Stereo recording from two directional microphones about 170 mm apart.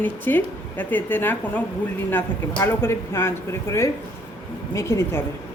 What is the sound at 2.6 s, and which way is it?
A woman's voice, 15° left (ahead or behind).